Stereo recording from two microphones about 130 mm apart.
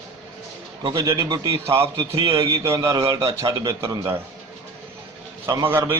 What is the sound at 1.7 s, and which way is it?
Speech, 45° right (ahead or behind).